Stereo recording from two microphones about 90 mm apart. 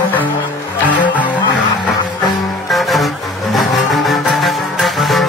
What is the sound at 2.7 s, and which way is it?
Music, centre (ahead or behind).